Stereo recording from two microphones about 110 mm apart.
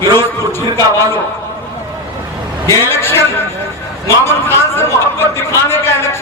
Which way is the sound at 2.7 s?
20° left (ahead or behind).